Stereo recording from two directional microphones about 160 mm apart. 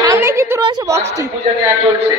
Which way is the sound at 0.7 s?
20° right (ahead or behind).